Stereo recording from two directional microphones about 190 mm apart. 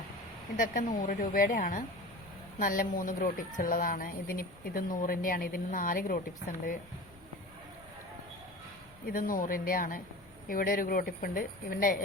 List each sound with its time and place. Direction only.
0.5 s speech: 45° left (ahead or behind)
9.0 s speech: 45° left (ahead or behind)